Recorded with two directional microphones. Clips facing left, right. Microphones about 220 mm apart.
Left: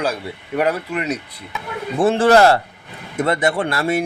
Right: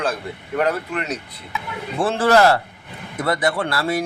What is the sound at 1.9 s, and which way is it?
A man's voice, 25° left (ahead or behind).